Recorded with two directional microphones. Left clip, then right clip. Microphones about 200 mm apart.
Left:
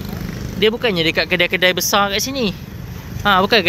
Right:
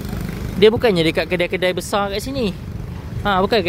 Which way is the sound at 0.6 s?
20° right (ahead or behind).